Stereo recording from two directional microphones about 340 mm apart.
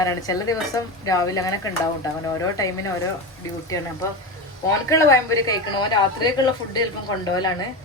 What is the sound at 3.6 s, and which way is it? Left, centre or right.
Speech, centre.